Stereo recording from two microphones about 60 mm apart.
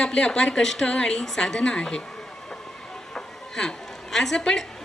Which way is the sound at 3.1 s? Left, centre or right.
Centre.